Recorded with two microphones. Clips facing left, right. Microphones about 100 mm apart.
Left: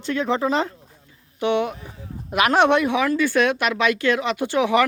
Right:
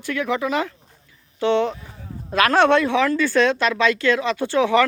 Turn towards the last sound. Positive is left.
turn(degrees=15)  # may be behind; listen again after turning